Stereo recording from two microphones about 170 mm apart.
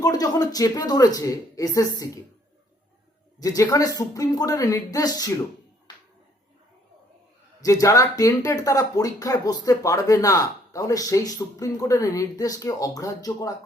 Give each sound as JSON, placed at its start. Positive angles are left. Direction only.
{"t": 0.0, "sound": "speech", "side_deg": 20}
{"t": 3.4, "sound": "speech", "side_deg": 20}
{"t": 7.6, "sound": "speech", "side_deg": 20}